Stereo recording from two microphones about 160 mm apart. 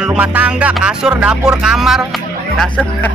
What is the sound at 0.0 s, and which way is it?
Speech, 5° right (ahead or behind).